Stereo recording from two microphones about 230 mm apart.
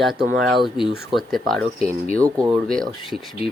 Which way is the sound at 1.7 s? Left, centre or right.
Left.